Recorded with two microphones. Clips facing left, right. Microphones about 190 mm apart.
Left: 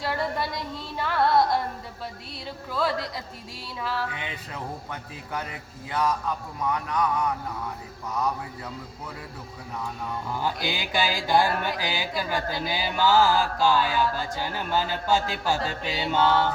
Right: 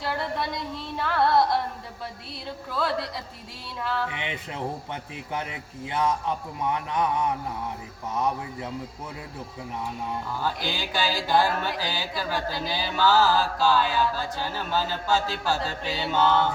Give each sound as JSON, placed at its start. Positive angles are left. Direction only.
{"t": 0.0, "sound": "music", "side_deg": 0}
{"t": 3.8, "sound": "music", "side_deg": 5}
{"t": 4.1, "sound": "a man's voice", "side_deg": -25}
{"t": 10.4, "sound": "music", "side_deg": 15}